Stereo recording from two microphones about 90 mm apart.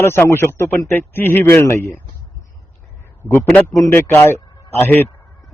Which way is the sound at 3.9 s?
30° left (ahead or behind).